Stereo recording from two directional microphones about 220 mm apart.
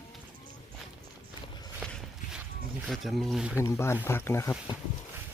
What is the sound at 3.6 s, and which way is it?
Speech, 10° left (ahead or behind).